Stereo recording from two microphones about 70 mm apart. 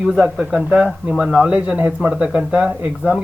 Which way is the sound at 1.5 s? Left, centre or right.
Right.